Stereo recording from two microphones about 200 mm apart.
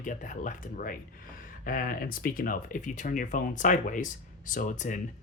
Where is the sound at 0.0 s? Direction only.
40° left (ahead or behind).